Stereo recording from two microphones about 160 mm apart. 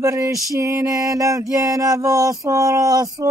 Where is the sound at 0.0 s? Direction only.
20° right (ahead or behind).